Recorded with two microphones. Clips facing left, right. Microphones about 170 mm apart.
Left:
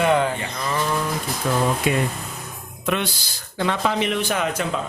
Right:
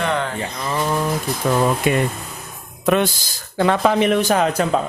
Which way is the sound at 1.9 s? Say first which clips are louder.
Right 3 dB; 55° right (ahead or behind).